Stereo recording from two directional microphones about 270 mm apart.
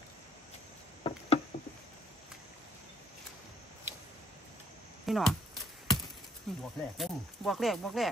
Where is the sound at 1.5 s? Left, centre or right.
Left.